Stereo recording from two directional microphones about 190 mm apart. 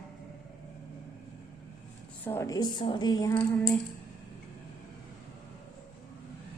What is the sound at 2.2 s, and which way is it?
A woman's voice, 15° left (ahead or behind).